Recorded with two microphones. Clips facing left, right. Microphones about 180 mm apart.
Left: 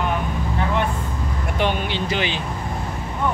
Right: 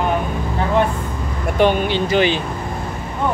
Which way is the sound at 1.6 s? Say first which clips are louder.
Right 7 dB; 45° right (ahead or behind).